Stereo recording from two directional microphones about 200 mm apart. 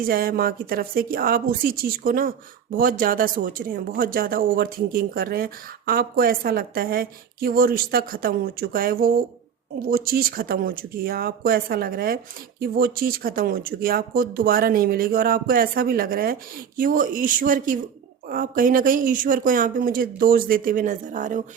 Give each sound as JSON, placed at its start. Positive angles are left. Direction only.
{"t": 0.0, "sound": "speech", "side_deg": -45}